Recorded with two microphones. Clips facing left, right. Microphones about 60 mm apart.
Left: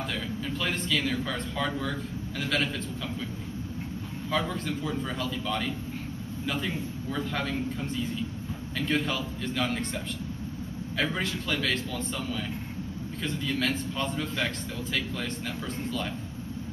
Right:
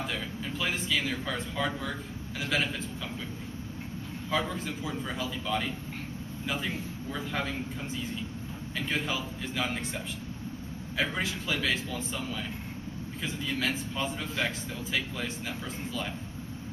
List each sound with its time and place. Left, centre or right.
0.1 s speech: centre
4.3 s a man's voice: centre
11.0 s a man's voice: centre